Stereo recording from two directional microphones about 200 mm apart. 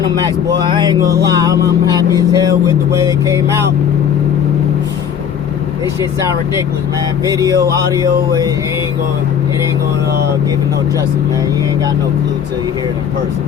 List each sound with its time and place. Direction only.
0.2 s speech: 20° right (ahead or behind)
7.3 s speech: 15° right (ahead or behind)